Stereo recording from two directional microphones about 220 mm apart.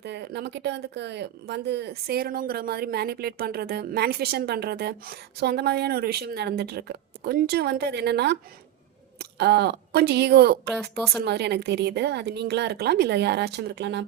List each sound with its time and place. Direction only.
0.0 s speech: 50° right (ahead or behind)